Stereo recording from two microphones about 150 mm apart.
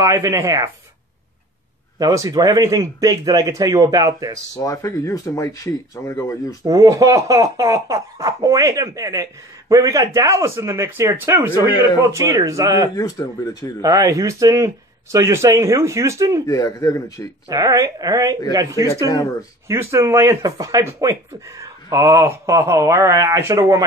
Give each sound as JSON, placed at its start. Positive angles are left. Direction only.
{"t": 0.0, "sound": "speech", "side_deg": -20}
{"t": 2.0, "sound": "speech", "side_deg": -25}
{"t": 4.6, "sound": "speech", "side_deg": 25}
{"t": 6.6, "sound": "speech", "side_deg": -20}
{"t": 12.9, "sound": "speech", "side_deg": 25}
{"t": 13.7, "sound": "speech", "side_deg": -25}
{"t": 16.4, "sound": "speech", "side_deg": 25}
{"t": 17.5, "sound": "speech", "side_deg": -25}